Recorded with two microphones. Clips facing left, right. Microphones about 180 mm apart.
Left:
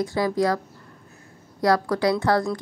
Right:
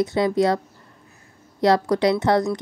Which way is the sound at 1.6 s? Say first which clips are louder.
Right 3 dB; 20° right (ahead or behind).